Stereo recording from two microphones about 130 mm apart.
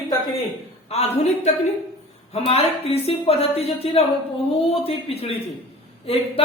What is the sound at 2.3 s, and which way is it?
A woman's voice, 50° left (ahead or behind).